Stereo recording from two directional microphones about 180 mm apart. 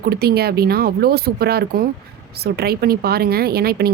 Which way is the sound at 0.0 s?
60° right (ahead or behind).